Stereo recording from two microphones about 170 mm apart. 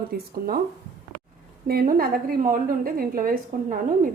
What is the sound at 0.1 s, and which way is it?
Speech, 60° right (ahead or behind).